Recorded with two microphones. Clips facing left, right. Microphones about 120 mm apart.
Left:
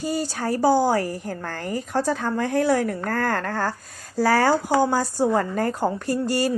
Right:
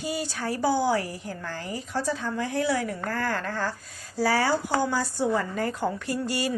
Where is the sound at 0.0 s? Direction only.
40° left (ahead or behind).